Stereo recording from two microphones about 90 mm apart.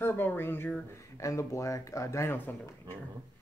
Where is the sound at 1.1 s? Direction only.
35° left (ahead or behind).